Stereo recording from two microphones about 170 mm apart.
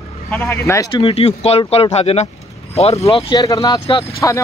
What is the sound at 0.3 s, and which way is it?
Speech, 15° left (ahead or behind).